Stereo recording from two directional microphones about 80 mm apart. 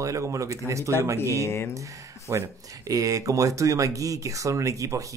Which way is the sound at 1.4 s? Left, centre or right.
Left.